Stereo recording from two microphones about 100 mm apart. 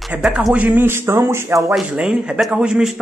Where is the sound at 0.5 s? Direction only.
20° right (ahead or behind).